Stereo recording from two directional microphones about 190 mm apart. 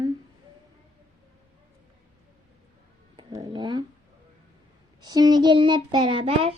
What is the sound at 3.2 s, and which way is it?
Speech, 20° right (ahead or behind).